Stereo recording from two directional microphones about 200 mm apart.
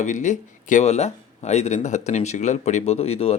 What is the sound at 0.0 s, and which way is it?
Speech, 40° left (ahead or behind).